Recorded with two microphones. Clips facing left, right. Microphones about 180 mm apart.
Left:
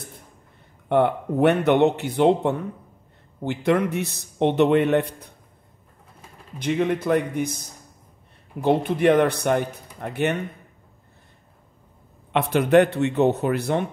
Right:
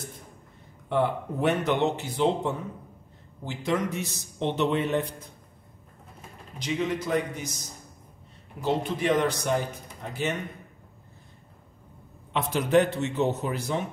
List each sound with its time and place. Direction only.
0.8 s a man's voice: 60° left (ahead or behind)
6.6 s a man's voice: 60° left (ahead or behind)
12.3 s a man's voice: 65° left (ahead or behind)